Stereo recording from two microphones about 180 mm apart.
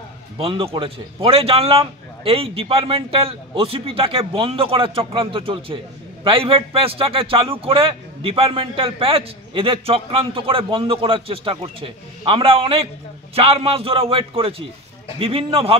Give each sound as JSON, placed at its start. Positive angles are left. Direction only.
{"t": 0.4, "sound": "a man's voice", "side_deg": -30}